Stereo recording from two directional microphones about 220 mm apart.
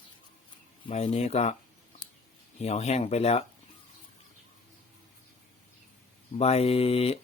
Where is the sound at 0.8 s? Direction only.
30° left (ahead or behind).